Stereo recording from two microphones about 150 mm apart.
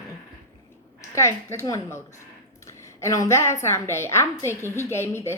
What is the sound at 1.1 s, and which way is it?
A woman's voice, 20° left (ahead or behind).